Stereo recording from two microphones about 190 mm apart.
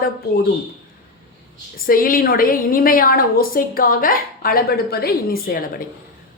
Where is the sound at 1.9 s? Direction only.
50° left (ahead or behind).